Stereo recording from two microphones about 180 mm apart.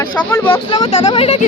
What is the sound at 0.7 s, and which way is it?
Speech, 30° left (ahead or behind).